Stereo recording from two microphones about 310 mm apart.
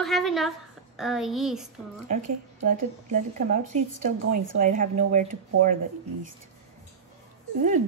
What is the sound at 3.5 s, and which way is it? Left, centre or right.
Speech, right.